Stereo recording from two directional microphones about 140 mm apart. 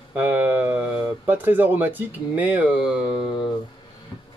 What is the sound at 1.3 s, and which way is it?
Speech, 15° right (ahead or behind).